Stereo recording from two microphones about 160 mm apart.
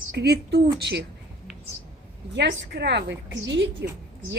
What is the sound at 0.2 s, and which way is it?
Speech, 85° right.